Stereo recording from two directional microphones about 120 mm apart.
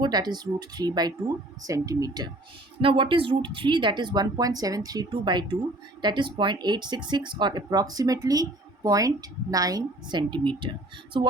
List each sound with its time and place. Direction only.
0.0 s speech: 35° right (ahead or behind)
2.8 s speech: 45° right (ahead or behind)